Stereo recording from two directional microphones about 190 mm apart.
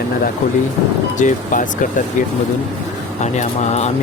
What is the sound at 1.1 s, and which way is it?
Speech, 40° left (ahead or behind).